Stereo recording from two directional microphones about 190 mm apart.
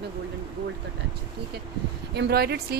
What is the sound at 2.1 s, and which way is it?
Speech, 60° right (ahead or behind).